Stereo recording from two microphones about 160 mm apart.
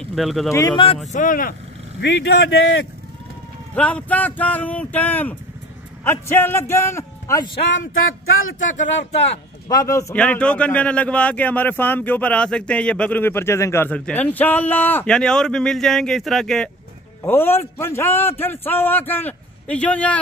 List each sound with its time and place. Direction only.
0.0 s speech: centre (ahead or behind)
0.5 s a man's voice: 20° left (ahead or behind)
1.1 s speech: 55° left (ahead or behind)
2.0 s speech: 90° left
3.7 s speech: 10° left (ahead or behind)
8.6 s speech: 45° left (ahead or behind)
9.7 s a man's voice: 20° left (ahead or behind)
10.1 s speech: 5° left (ahead or behind)
17.2 s speech: 15° left (ahead or behind)